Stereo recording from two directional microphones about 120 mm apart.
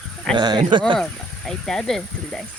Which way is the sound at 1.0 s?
5° left (ahead or behind).